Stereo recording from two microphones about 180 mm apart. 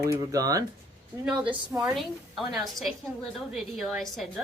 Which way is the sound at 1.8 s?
Centre (ahead or behind).